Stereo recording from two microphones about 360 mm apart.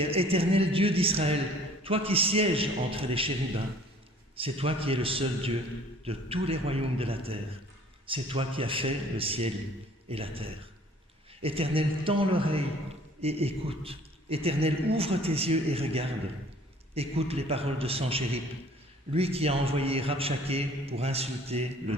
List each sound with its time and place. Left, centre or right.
0.0 s a man's voice: centre
4.4 s a man's voice: centre